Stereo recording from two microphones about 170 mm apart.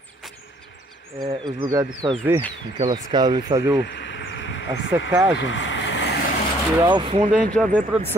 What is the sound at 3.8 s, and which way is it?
Insect, 90° left.